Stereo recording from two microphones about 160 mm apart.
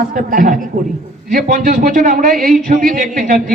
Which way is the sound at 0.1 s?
60° right (ahead or behind).